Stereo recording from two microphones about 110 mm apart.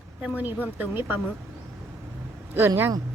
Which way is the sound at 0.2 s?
15° right (ahead or behind).